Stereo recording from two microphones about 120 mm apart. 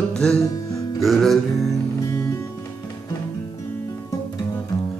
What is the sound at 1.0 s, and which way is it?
Speech, centre (ahead or behind).